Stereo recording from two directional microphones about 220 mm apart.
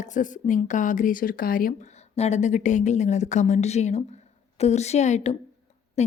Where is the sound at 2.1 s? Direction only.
30° left (ahead or behind).